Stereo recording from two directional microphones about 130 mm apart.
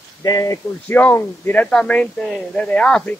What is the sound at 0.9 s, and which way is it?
Speech, 15° left (ahead or behind).